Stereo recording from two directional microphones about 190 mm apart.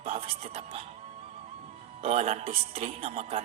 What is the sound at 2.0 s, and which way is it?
Speech, 35° right (ahead or behind).